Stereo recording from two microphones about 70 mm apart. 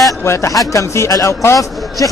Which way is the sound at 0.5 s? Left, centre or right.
Left.